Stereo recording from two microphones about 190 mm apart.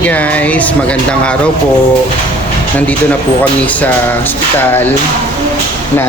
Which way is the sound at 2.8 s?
10° left (ahead or behind).